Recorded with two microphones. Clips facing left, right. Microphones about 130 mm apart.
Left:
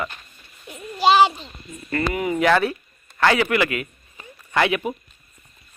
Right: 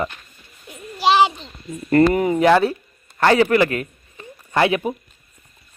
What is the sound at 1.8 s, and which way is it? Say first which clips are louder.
Speech: right 8 dB; 40° right (ahead or behind).